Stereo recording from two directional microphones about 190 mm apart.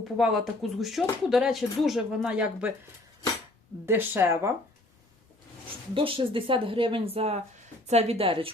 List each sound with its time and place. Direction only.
0.2 s speech: centre (ahead or behind)
3.8 s a woman's voice: 10° right (ahead or behind)
5.9 s a woman's voice: 30° right (ahead or behind)